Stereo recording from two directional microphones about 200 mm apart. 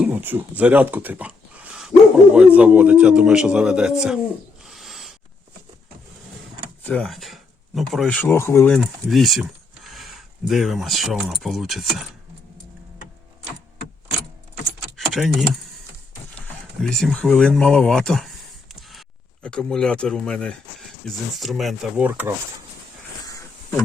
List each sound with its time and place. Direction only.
0.0 s a man's voice: 10° right (ahead or behind)
4.6 s owl: centre (ahead or behind)
6.8 s speech: 5° left (ahead or behind)
14.9 s keys jangling: centre (ahead or behind)
16.8 s a man's voice: centre (ahead or behind)
18.7 s a sound: centre (ahead or behind)
21.3 s a man's voice: centre (ahead or behind)
23.2 s a sound: 15° left (ahead or behind)